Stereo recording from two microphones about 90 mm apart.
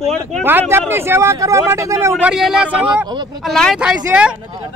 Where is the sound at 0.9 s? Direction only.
25° right (ahead or behind).